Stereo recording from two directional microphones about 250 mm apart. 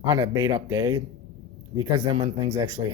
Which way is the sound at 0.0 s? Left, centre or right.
Centre.